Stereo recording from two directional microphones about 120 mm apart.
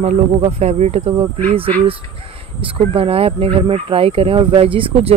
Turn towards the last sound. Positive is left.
turn(degrees=-50)  # may be behind; listen again after turning